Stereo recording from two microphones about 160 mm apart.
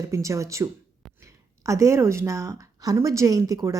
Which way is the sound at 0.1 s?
20° right (ahead or behind).